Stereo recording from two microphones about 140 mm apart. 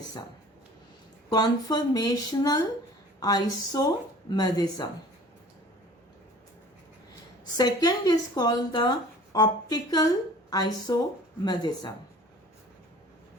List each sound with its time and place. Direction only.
1.3 s a woman's voice: 30° left (ahead or behind)
7.5 s a woman's voice: 30° left (ahead or behind)